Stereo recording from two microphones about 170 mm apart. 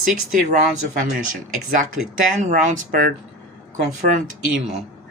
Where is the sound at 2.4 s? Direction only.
50° right (ahead or behind).